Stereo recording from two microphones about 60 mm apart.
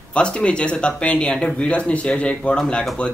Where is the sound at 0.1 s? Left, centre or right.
Centre.